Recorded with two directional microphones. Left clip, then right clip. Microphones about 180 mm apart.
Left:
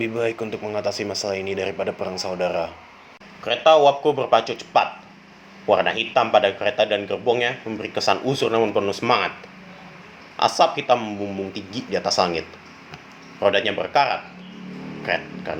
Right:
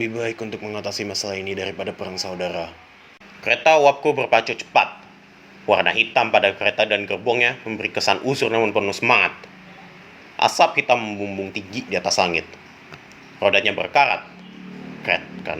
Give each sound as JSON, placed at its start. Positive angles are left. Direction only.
{"t": 0.0, "sound": "a man's voice", "side_deg": -20}
{"t": 10.3, "sound": "a man's voice", "side_deg": -20}